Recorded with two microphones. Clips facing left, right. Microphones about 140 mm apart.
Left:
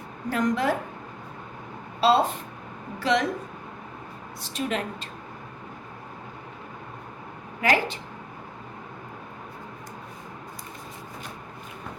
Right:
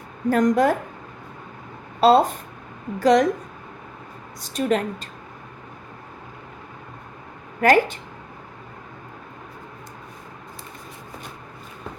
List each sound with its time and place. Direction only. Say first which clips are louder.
0.3 s a woman's voice: right 6 dB; 45° right (ahead or behind)
2.0 s a woman's voice: right 5 dB; 45° right (ahead or behind)
4.4 s a woman's voice: right 7 dB; 40° right (ahead or behind)
7.6 s a woman's voice: right 7 dB; 50° right (ahead or behind)